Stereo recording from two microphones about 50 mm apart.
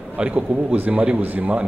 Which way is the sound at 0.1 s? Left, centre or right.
Right.